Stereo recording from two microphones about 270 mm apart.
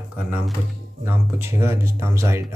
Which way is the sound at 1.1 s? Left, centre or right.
Centre.